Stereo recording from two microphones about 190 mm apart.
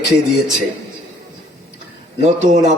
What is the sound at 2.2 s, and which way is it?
Speech, 40° right (ahead or behind).